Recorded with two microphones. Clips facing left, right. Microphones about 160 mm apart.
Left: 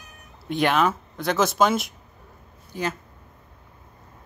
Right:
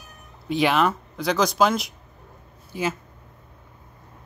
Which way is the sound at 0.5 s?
Centre (ahead or behind).